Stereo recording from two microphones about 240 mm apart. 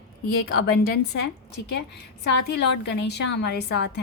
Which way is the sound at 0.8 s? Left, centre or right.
Left.